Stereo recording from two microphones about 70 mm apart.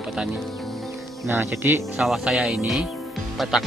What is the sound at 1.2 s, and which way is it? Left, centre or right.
Speech, right.